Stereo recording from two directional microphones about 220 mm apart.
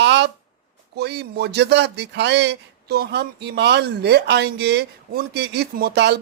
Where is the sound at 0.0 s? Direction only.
50° right (ahead or behind).